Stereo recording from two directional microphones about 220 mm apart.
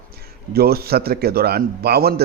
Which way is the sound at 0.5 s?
45° right (ahead or behind).